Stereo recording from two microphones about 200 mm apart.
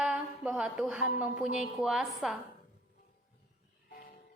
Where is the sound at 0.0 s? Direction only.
5° right (ahead or behind).